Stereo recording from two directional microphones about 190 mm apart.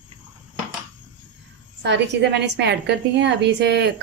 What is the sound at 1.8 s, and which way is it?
Speech, 65° right (ahead or behind).